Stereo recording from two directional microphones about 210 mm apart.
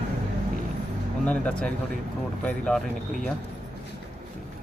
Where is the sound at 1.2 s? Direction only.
5° left (ahead or behind).